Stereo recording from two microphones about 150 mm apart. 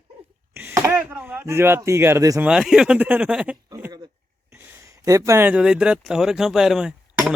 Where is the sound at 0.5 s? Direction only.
15° right (ahead or behind).